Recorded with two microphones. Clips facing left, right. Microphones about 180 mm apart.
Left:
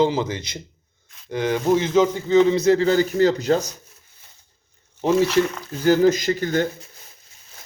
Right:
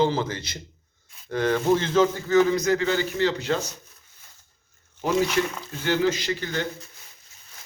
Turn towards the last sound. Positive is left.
turn(degrees=45)  # may be behind; listen again after turning